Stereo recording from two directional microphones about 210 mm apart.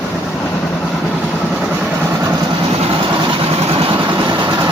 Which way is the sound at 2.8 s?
25° right (ahead or behind).